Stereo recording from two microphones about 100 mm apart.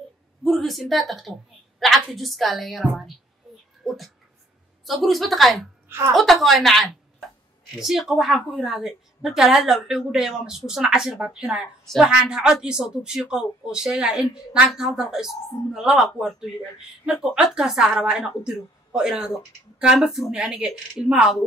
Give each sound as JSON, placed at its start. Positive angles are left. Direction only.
{"t": 0.4, "sound": "a woman's voice", "side_deg": 0}
{"t": 3.8, "sound": "a sound", "side_deg": 0}
{"t": 4.8, "sound": "a woman's voice", "side_deg": 0}
{"t": 5.9, "sound": "a woman's voice", "side_deg": -25}
{"t": 6.1, "sound": "a woman's voice", "side_deg": 0}